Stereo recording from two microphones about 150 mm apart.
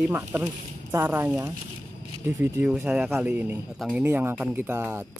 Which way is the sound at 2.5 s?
10° right (ahead or behind).